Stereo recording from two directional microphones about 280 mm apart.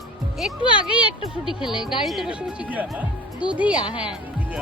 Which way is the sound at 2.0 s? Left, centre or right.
Centre.